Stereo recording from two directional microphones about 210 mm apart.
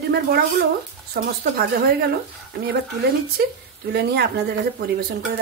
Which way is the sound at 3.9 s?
50° right (ahead or behind).